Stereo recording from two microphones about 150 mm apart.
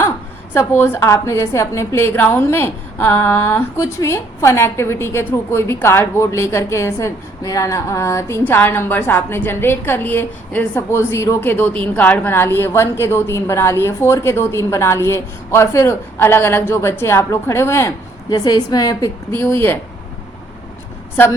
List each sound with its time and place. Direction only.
0.5 s a woman's voice: 15° left (ahead or behind)
19.3 s a woman's voice: 15° left (ahead or behind)